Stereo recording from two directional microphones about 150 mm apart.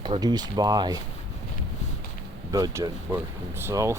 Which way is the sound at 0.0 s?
30° right (ahead or behind).